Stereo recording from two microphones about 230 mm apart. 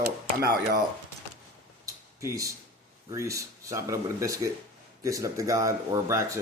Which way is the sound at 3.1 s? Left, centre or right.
Centre.